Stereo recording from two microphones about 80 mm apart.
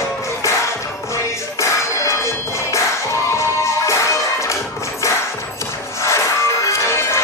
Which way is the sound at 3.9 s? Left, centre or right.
Left.